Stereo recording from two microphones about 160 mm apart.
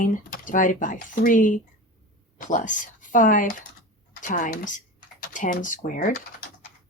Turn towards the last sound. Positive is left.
turn(degrees=60)  # may be behind; listen again after turning